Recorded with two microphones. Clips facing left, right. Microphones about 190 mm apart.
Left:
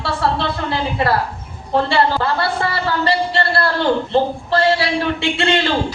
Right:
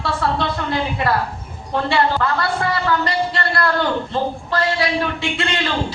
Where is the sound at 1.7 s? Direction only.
30° left (ahead or behind).